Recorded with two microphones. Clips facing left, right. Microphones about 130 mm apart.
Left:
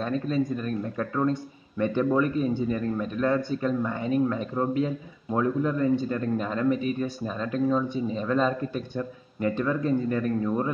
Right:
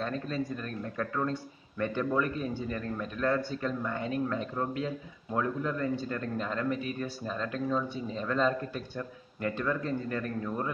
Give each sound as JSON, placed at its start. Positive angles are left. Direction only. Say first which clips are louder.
{"t": 0.0, "sound": "speech", "louder": "left 7 dB", "side_deg": 15}